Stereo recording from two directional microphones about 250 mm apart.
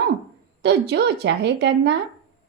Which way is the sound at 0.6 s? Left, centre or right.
Right.